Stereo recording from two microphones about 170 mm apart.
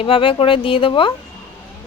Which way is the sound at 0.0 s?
30° left (ahead or behind).